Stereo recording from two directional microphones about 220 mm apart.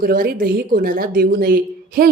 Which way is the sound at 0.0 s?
45° right (ahead or behind).